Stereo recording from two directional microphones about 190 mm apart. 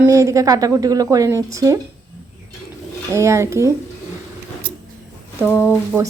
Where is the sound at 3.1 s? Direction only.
15° right (ahead or behind).